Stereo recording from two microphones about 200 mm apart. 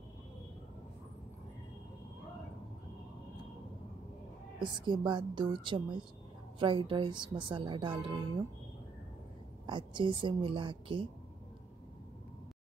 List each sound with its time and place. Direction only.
4.6 s a woman's voice: 25° right (ahead or behind)
9.7 s a woman's voice: 25° right (ahead or behind)